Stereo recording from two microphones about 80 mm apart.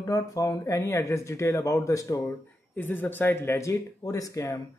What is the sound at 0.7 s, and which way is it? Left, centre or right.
A man's voice, left.